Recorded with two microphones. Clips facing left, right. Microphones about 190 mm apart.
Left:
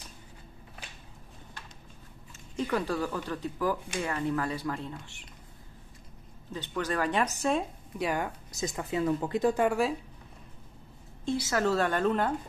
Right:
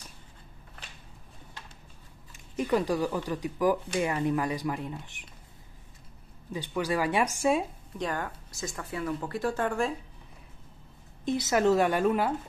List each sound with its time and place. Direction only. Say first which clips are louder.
2.5 s speech: right 3 dB; 15° right (ahead or behind)
6.5 s speech: right 2 dB; 10° right (ahead or behind)
8.0 s speech: left 2 dB; 10° left (ahead or behind)
11.2 s speech: right 4 dB; 20° right (ahead or behind)